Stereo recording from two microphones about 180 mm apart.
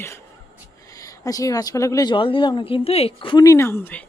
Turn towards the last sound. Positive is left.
turn(degrees=10)  # may be behind; listen again after turning